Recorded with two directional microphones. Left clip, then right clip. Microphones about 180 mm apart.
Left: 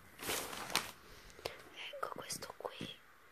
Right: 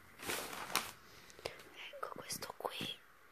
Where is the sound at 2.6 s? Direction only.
15° right (ahead or behind).